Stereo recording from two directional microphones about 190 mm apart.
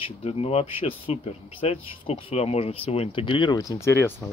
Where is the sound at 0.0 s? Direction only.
30° left (ahead or behind).